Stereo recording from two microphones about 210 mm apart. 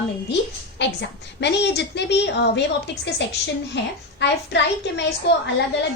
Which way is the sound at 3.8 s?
55° left (ahead or behind).